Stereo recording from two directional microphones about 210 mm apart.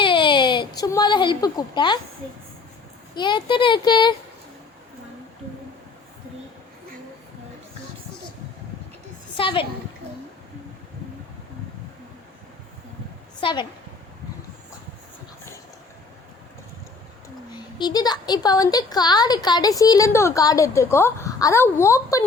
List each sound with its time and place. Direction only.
0.0 s a sound: 20° left (ahead or behind)
3.2 s speech: 20° left (ahead or behind)
9.4 s speech: 25° left (ahead or behind)
13.4 s speech: 20° left (ahead or behind)
17.7 s a woman's voice: 20° left (ahead or behind)